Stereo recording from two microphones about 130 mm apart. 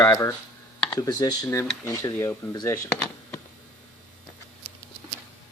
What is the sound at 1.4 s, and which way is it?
Speech, 20° left (ahead or behind).